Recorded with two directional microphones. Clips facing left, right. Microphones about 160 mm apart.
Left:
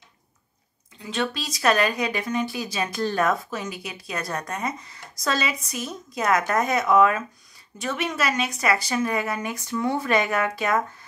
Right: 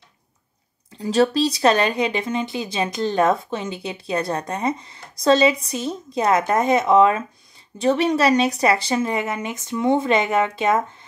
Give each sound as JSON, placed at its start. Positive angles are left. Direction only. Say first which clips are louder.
{"t": 0.9, "sound": "speech", "louder": "right 10 dB", "side_deg": -35}